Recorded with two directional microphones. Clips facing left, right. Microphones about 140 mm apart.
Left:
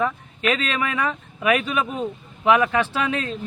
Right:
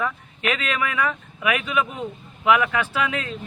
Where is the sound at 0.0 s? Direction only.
30° left (ahead or behind).